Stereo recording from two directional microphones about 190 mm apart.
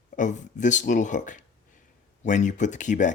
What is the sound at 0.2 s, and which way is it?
Speech, 40° left (ahead or behind).